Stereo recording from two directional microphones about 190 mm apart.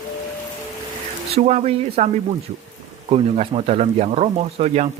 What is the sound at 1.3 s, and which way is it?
Speech, 35° right (ahead or behind).